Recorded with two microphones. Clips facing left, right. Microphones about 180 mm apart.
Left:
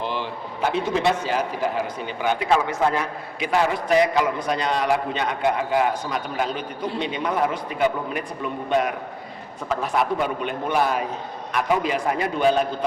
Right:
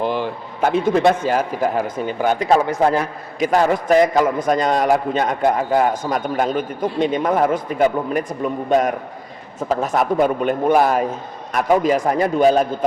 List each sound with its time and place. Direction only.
0.0 s a man's voice: 50° right (ahead or behind)